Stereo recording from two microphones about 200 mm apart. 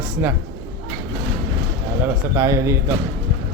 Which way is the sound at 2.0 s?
15° right (ahead or behind).